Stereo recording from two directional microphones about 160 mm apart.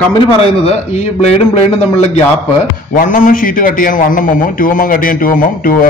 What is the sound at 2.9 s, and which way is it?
A man's voice, 55° left (ahead or behind).